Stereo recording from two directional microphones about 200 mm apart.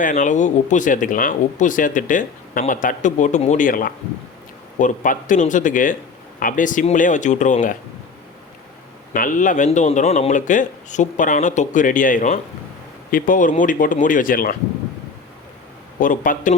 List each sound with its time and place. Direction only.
0.0 s speech: 40° left (ahead or behind)
9.1 s speech: 40° left (ahead or behind)
16.0 s speech: 45° left (ahead or behind)